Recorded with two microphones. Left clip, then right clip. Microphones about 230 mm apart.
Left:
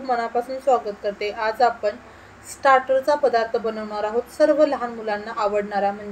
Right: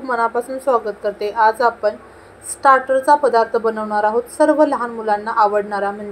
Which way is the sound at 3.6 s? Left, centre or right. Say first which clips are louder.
Right 8 dB; centre.